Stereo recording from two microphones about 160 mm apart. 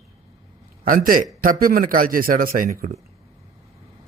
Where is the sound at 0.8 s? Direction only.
60° right (ahead or behind).